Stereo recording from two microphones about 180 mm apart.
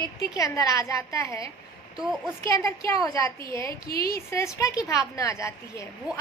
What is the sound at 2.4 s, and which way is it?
A woman's voice, 15° left (ahead or behind).